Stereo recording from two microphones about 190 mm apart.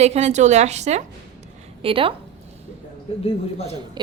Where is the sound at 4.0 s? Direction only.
25° right (ahead or behind).